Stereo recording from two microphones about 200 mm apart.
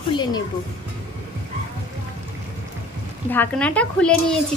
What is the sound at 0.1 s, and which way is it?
Speech, 20° left (ahead or behind).